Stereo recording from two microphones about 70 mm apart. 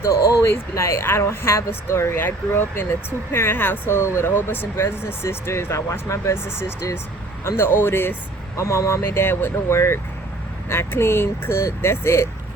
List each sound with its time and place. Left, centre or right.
0.3 s speech: left
8.5 s speech: left